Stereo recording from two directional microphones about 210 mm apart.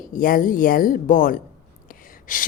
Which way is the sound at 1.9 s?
40° left (ahead or behind).